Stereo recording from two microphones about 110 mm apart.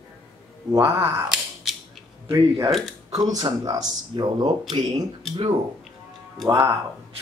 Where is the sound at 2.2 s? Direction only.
50° right (ahead or behind).